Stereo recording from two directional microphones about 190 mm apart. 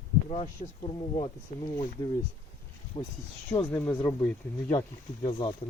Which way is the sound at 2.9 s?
25° left (ahead or behind).